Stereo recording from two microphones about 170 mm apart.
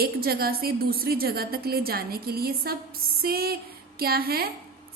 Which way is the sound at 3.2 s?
65° right (ahead or behind).